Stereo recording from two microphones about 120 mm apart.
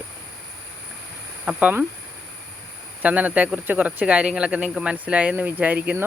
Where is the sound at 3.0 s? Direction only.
10° right (ahead or behind).